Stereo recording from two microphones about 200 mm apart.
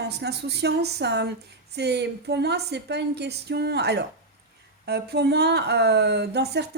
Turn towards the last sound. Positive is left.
turn(degrees=-55)  # may be behind; listen again after turning